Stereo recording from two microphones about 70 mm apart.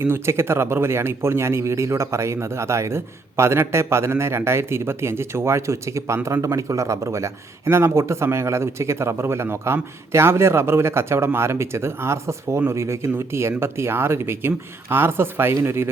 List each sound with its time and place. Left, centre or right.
0.0 s speech: right